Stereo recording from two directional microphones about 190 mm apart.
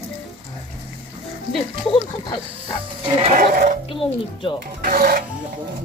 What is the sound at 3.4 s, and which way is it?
Speech, 50° right (ahead or behind).